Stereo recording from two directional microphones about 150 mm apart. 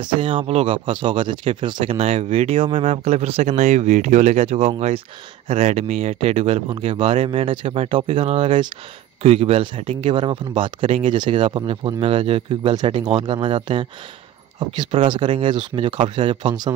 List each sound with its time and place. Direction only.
0.0 s speech: 35° right (ahead or behind)